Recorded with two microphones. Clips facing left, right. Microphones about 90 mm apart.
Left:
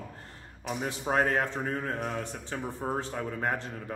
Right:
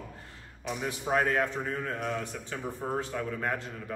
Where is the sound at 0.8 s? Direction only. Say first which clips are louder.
Left 1 dB; 35° left (ahead or behind).